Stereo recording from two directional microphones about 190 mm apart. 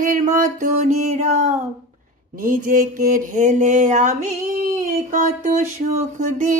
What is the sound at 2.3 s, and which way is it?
Music, 45° right (ahead or behind).